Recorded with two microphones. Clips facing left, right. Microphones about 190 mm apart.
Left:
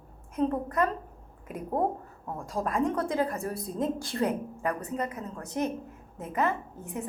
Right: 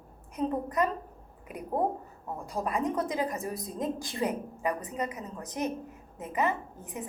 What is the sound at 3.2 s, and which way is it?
Speech, 15° right (ahead or behind).